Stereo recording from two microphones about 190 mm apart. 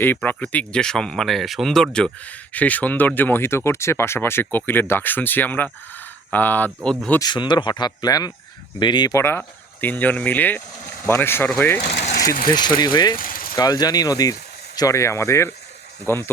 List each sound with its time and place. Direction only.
0.0 s speech: 10° left (ahead or behind)
7.2 s speech: 25° left (ahead or behind)
12.5 s speech: 20° left (ahead or behind)
13.1 s vehicle: 50° left (ahead or behind)
13.6 s speech: 20° left (ahead or behind)